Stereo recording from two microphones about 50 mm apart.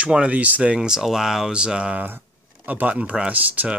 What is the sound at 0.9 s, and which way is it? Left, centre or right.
Speech, centre.